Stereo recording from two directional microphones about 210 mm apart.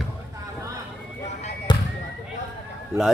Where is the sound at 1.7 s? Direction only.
20° left (ahead or behind).